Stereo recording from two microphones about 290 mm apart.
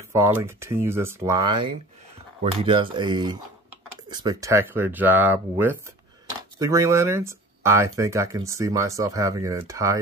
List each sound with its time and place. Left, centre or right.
0.1 s speech: centre